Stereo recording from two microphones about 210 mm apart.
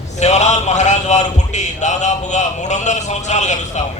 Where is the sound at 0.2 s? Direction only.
35° left (ahead or behind).